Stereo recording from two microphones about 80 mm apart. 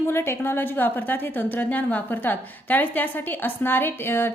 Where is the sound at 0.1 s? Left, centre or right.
Left.